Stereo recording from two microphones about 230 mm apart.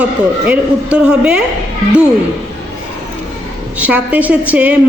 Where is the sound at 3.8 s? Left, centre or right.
Centre.